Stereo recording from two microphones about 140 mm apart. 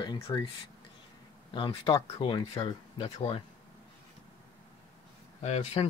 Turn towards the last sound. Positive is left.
turn(degrees=50)  # may be behind; listen again after turning